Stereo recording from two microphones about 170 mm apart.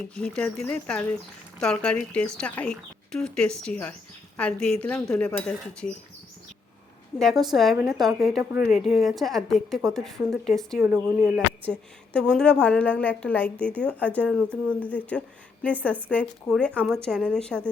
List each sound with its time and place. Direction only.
0.1 s a woman's voice: 5° left (ahead or behind)
7.2 s a woman's voice: centre (ahead or behind)
10.8 s speech: 10° right (ahead or behind)
11.3 s a woman's voice: 5° left (ahead or behind)